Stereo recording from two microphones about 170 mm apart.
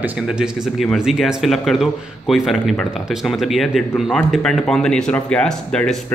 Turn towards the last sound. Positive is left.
turn(degrees=5)  # may be behind; listen again after turning